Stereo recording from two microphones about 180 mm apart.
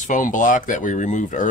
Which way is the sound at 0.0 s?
45° left (ahead or behind).